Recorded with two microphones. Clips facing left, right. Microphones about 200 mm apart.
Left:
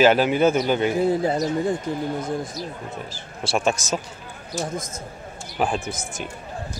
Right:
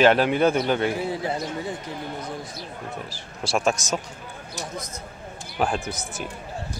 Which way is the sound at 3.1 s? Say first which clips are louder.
Left 1 dB; centre (ahead or behind).